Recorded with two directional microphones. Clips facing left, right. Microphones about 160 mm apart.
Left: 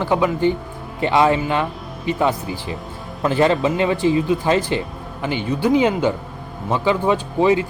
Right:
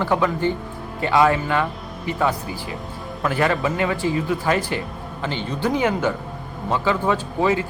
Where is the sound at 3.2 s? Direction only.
25° left (ahead or behind).